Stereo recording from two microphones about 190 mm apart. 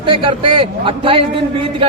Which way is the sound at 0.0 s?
25° right (ahead or behind).